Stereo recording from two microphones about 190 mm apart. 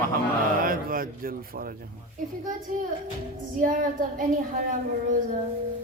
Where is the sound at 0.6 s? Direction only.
45° right (ahead or behind).